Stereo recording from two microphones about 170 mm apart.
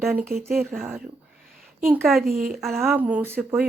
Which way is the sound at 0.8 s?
10° right (ahead or behind).